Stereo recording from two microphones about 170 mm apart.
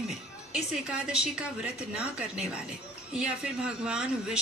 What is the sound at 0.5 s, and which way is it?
A woman's voice, 5° right (ahead or behind).